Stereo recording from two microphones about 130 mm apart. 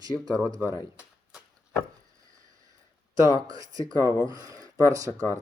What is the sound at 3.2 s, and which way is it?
Speech, 25° right (ahead or behind).